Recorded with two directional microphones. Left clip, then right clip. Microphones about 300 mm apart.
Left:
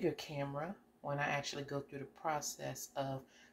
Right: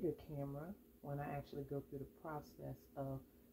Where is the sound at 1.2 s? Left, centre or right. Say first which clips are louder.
Left 11 dB; centre.